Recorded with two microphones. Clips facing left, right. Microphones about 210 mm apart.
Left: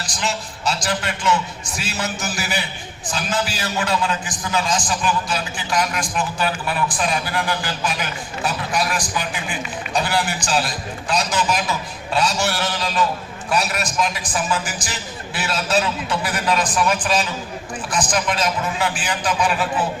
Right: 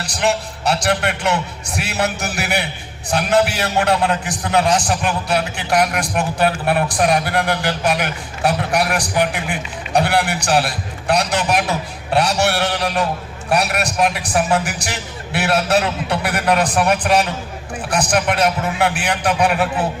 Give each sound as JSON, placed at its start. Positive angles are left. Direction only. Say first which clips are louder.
{"t": 0.0, "sound": "a man's voice", "louder": "right 7 dB", "side_deg": -65}